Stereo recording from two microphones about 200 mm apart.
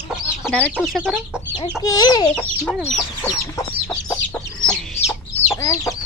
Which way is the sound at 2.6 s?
Centre (ahead or behind).